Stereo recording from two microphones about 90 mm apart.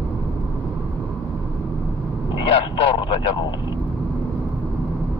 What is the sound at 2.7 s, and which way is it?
Vehicle, 60° left (ahead or behind).